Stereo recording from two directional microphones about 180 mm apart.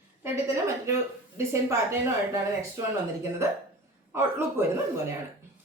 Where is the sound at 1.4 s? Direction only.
15° right (ahead or behind).